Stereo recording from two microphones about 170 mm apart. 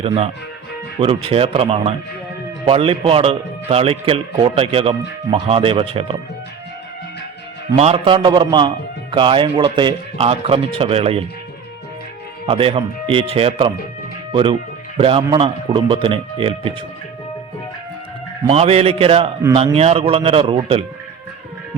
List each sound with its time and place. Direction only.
0.0 s a man's voice: 35° right (ahead or behind)
7.8 s a man's voice: 35° right (ahead or behind)
12.5 s a man's voice: 35° right (ahead or behind)
14.9 s a man's voice: 35° right (ahead or behind)
18.4 s a man's voice: 35° right (ahead or behind)